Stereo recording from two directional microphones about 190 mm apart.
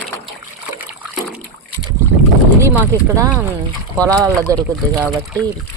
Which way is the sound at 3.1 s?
15° right (ahead or behind).